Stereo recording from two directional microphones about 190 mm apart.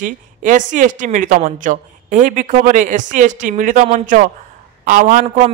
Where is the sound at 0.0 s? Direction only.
45° right (ahead or behind).